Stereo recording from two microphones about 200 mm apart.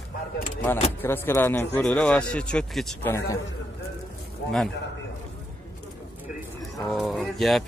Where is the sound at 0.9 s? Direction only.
10° left (ahead or behind).